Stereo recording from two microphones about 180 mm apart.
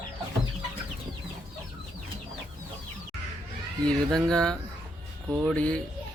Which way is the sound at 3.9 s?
5° left (ahead or behind).